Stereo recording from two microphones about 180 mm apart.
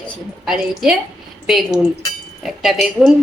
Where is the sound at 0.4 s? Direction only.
Centre (ahead or behind).